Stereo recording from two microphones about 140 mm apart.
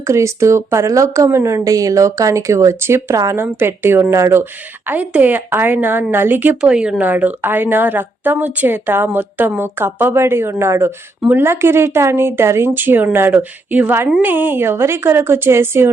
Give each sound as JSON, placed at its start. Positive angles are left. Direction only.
{"t": 0.1, "sound": "speech", "side_deg": -20}